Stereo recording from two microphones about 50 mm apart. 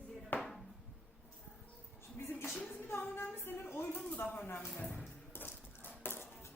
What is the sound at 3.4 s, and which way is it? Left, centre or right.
Music, left.